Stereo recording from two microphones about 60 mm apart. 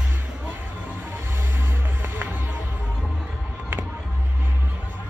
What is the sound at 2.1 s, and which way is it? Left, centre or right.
Music, right.